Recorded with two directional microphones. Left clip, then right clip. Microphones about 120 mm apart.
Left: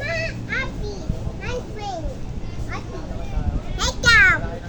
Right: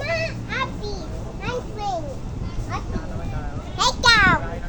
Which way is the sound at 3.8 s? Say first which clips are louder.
Left 1 dB; 55° left (ahead or behind).